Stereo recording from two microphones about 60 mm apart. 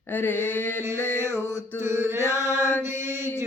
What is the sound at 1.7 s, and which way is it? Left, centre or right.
Mantra, right.